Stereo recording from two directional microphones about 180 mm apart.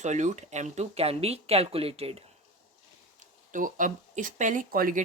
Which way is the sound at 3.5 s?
45° right (ahead or behind).